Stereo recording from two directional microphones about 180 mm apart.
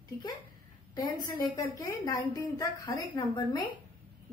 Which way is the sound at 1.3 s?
20° left (ahead or behind).